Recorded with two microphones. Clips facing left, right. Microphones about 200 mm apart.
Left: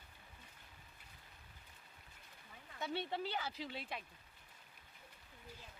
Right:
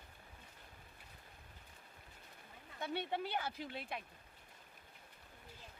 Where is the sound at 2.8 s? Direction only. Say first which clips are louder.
Right 1 dB; 55° right (ahead or behind).